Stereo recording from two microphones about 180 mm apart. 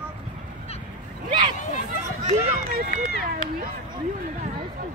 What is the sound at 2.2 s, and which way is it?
Run, 40° right (ahead or behind).